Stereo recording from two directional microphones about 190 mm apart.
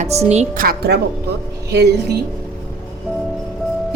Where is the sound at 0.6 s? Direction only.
50° right (ahead or behind).